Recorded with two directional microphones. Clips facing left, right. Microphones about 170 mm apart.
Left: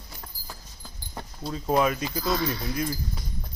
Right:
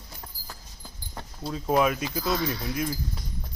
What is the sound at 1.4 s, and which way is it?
Speech, 5° right (ahead or behind).